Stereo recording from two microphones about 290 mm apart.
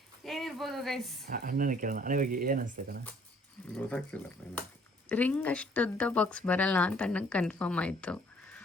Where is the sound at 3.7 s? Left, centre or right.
Centre.